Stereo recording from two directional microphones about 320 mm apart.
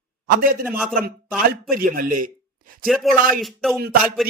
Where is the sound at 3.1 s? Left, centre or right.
Centre.